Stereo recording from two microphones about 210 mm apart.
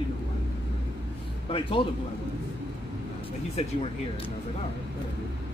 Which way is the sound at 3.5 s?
25° left (ahead or behind).